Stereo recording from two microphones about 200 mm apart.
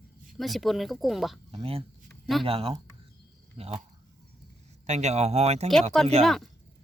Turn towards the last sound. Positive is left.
turn(degrees=0)  # may be behind; listen again after turning